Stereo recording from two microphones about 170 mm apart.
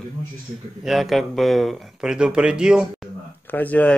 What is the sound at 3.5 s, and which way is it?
Speech, 10° left (ahead or behind).